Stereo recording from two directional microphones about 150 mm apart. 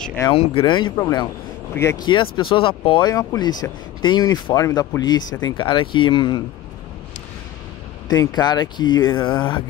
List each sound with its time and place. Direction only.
0.0 s a sound: 15° left (ahead or behind)
0.3 s speech: 35° left (ahead or behind)
1.8 s speech: 20° left (ahead or behind)
2.3 s speech: 35° left (ahead or behind)
8.1 s speech: 25° left (ahead or behind)